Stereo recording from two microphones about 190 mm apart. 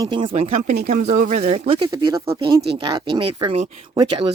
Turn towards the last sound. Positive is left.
turn(degrees=-25)  # may be behind; listen again after turning